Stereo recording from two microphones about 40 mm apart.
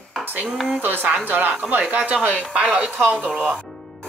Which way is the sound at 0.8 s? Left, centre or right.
Right.